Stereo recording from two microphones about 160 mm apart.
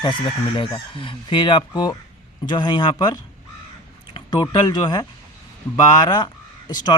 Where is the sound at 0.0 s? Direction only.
30° left (ahead or behind).